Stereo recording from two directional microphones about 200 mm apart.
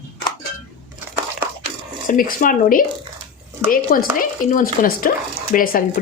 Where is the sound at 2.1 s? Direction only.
45° left (ahead or behind).